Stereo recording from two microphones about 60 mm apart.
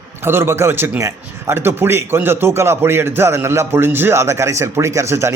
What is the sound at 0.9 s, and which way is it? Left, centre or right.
Speech, right.